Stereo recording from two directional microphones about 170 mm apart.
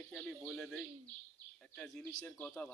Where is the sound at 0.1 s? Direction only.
Centre (ahead or behind).